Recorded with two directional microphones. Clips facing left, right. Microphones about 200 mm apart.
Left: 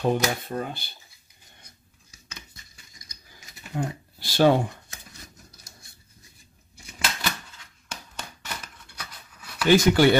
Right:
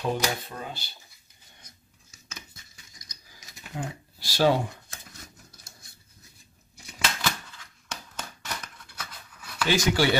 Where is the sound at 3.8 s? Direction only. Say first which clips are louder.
Left 5 dB; 55° left (ahead or behind).